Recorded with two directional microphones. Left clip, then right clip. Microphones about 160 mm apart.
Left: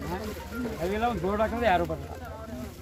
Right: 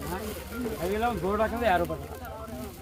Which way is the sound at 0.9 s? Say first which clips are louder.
Even; 40° left (ahead or behind).